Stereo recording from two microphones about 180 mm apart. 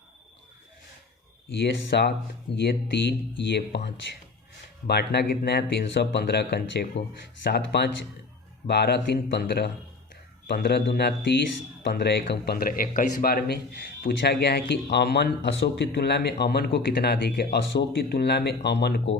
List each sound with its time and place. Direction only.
1.6 s speech: 70° left (ahead or behind)